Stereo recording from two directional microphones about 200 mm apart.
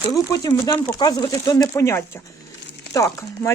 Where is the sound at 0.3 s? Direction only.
20° left (ahead or behind).